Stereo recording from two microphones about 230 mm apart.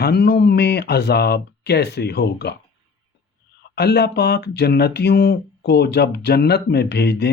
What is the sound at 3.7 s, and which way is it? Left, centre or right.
Speech, left.